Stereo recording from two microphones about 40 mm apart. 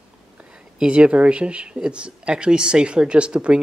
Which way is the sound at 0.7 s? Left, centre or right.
Right.